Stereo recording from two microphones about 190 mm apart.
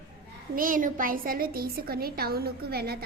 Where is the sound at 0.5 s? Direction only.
45° right (ahead or behind).